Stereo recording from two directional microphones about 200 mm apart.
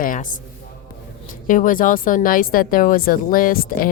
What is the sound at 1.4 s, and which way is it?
Speech, 40° left (ahead or behind).